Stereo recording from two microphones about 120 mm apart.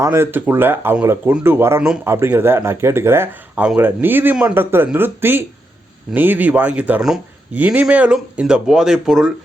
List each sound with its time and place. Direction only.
0.0 s speech: 20° right (ahead or behind); by 9.3 s 5° right (ahead or behind)